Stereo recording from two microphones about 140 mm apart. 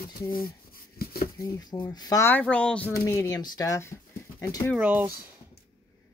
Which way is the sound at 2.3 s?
10° left (ahead or behind).